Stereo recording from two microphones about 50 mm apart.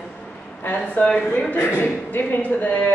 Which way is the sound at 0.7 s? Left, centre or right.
Left.